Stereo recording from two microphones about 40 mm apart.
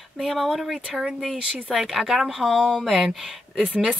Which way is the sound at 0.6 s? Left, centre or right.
Centre.